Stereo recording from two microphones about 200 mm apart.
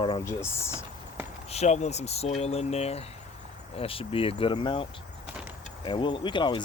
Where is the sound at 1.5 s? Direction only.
35° left (ahead or behind).